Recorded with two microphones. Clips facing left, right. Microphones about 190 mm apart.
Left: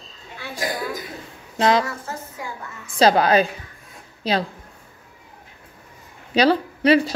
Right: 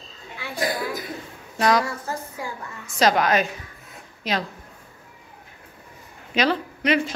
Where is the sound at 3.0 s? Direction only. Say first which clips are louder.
Left 4 dB; 30° left (ahead or behind).